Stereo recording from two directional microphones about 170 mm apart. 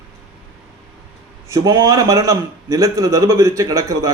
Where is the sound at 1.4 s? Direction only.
20° right (ahead or behind).